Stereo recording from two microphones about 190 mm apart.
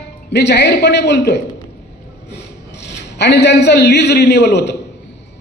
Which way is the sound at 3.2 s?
65° left (ahead or behind).